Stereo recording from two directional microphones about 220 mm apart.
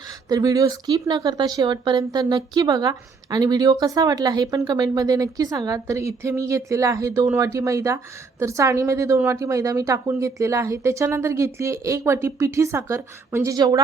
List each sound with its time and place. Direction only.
0.3 s speech: 15° right (ahead or behind)